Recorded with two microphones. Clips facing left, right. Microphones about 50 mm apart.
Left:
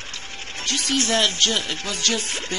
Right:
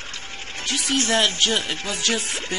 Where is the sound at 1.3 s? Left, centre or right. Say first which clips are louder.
Right 1 dB; centre.